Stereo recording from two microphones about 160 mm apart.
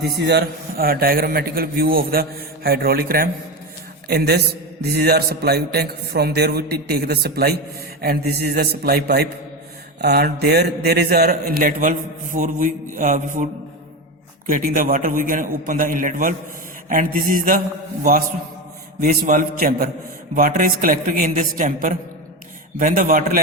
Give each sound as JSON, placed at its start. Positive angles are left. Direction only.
{"t": 0.0, "sound": "a man's voice", "side_deg": -90}
{"t": 14.5, "sound": "a man's voice", "side_deg": -55}
{"t": 18.9, "sound": "a man's voice", "side_deg": -60}